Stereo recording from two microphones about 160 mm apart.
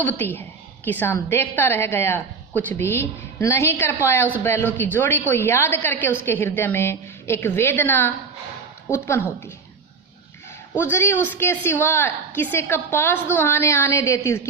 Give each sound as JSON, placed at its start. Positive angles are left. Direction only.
{"t": 0.0, "sound": "a woman's voice", "side_deg": 10}
{"t": 10.8, "sound": "a woman's voice", "side_deg": 15}